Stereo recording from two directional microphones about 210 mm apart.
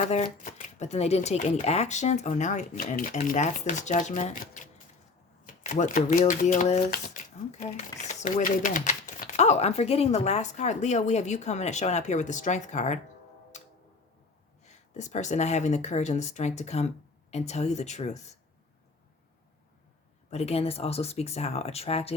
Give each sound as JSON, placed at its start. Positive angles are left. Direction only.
{"t": 0.1, "sound": "speech", "side_deg": 35}
{"t": 14.6, "sound": "speech", "side_deg": 35}
{"t": 20.3, "sound": "speech", "side_deg": 30}